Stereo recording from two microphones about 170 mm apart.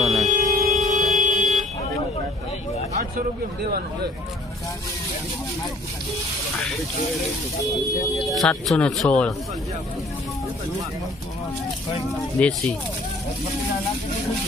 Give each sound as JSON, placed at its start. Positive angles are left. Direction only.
{"t": 0.2, "sound": "a sound", "side_deg": -45}
{"t": 8.2, "sound": "speech", "side_deg": 0}
{"t": 12.4, "sound": "speech", "side_deg": 5}